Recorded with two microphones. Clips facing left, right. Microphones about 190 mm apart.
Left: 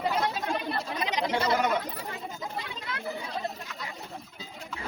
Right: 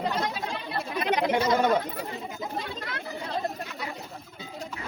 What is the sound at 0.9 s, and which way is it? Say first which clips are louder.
Chatter: right 7 dB; 55° right (ahead or behind).